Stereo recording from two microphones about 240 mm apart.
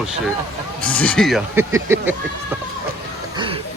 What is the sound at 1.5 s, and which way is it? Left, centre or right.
Speech, centre.